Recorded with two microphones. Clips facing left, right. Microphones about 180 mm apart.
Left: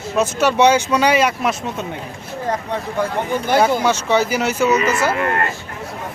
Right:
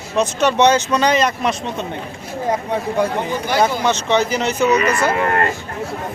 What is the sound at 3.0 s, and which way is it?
Speech, 15° right (ahead or behind).